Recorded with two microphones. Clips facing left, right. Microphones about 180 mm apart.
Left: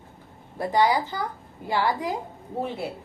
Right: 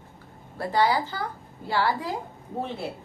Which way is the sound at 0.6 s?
15° left (ahead or behind).